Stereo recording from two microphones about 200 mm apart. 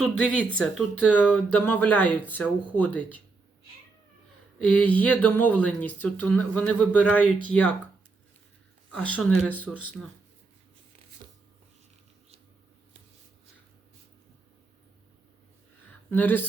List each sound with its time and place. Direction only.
0.0 s speech: 5° left (ahead or behind)
4.6 s speech: 5° left (ahead or behind)
8.9 s speech: 5° left (ahead or behind)
11.2 s a sound: 25° right (ahead or behind)
16.0 s speech: 10° left (ahead or behind)